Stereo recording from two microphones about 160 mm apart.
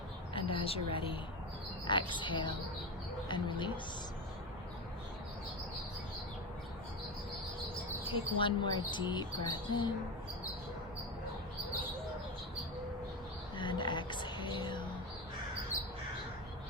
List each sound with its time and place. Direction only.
0.3 s a woman's voice: 35° left (ahead or behind)
8.1 s speech: 30° left (ahead or behind)
13.6 s a sound: 30° left (ahead or behind)